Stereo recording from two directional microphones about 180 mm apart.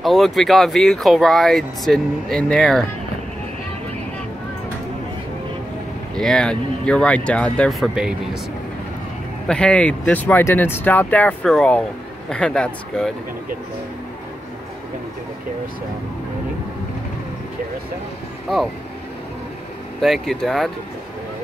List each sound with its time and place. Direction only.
0.0 s speech: centre (ahead or behind)
6.1 s speech: 5° left (ahead or behind)
9.5 s speech: 5° left (ahead or behind)
20.0 s speech: centre (ahead or behind)